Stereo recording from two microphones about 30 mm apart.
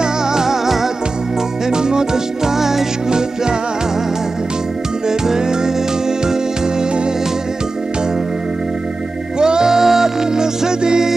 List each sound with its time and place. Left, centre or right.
0.0 s music: centre
1.7 s music: right
3.1 s music: right
5.0 s music: right
9.4 s music: right